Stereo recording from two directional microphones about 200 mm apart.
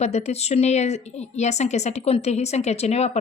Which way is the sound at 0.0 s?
35° left (ahead or behind).